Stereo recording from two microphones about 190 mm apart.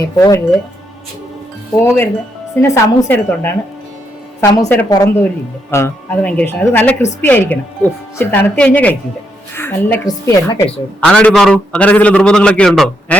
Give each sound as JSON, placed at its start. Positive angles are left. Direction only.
{"t": 0.0, "sound": "a woman's voice", "side_deg": 15}
{"t": 2.6, "sound": "a woman's voice", "side_deg": 15}